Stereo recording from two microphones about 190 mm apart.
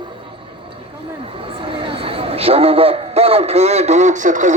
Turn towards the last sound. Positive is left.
turn(degrees=-40)  # may be behind; listen again after turning